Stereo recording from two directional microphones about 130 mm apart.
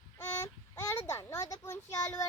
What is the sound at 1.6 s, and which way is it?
Child singing, 20° left (ahead or behind).